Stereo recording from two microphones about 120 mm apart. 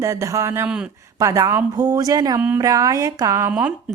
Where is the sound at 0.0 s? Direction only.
25° right (ahead or behind).